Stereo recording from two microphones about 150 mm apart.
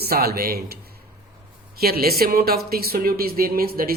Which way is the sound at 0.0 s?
90° right.